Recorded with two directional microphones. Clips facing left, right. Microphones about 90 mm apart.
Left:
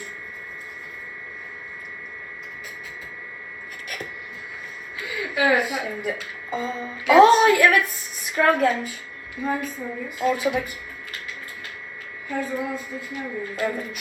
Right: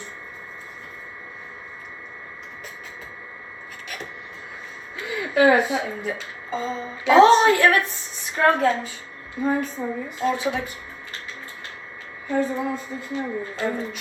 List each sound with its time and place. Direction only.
4.9 s a sound: 30° right (ahead or behind)
6.5 s music: 10° left (ahead or behind)
7.0 s speech: 30° right (ahead or behind)
12.3 s speech: 30° right (ahead or behind)